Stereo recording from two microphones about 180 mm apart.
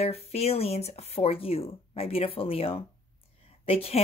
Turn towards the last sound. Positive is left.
turn(degrees=35)  # may be behind; listen again after turning